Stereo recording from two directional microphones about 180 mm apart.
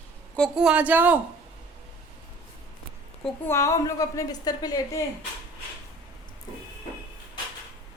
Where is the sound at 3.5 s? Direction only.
15° left (ahead or behind).